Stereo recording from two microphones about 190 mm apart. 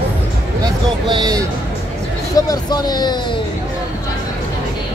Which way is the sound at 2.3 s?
20° left (ahead or behind).